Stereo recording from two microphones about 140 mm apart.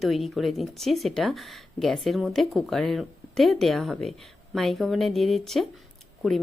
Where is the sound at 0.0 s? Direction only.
Centre (ahead or behind).